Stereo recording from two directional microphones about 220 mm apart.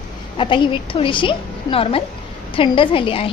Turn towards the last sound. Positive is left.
turn(degrees=25)  # may be behind; listen again after turning